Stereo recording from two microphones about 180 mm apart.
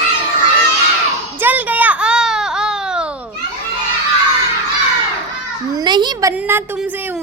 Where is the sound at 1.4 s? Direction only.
10° right (ahead or behind).